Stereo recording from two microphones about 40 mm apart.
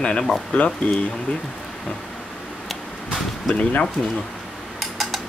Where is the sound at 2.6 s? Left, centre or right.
Centre.